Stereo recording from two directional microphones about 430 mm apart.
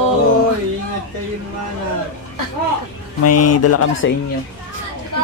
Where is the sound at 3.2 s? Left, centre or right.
Left.